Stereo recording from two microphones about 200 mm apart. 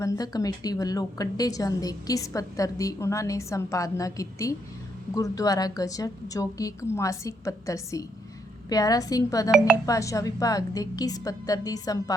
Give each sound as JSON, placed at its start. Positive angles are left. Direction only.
{"t": 0.0, "sound": "a woman's voice", "side_deg": 20}